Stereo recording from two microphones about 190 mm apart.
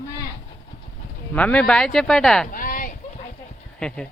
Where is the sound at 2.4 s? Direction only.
45° left (ahead or behind).